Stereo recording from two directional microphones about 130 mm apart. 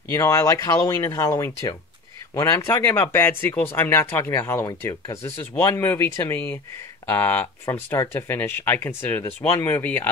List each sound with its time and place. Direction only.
0.1 s speech: 25° left (ahead or behind)